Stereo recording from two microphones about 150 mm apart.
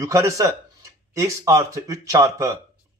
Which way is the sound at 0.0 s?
20° right (ahead or behind).